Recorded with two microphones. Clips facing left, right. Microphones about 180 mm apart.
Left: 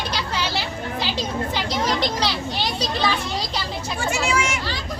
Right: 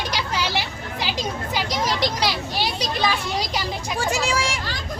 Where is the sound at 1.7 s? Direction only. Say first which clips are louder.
Even; 10° right (ahead or behind).